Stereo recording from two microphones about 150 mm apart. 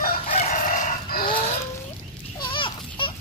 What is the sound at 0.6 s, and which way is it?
Chicken, 70° left (ahead or behind).